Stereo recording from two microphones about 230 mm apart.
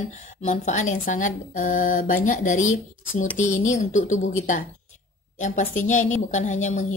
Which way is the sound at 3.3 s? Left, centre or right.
Left.